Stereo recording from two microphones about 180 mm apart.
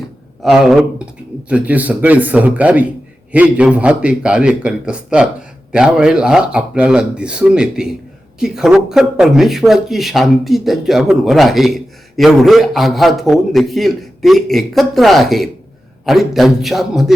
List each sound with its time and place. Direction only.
0.4 s speech: centre (ahead or behind)